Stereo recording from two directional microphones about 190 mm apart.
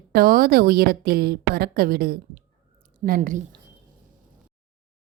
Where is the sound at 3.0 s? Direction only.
40° right (ahead or behind).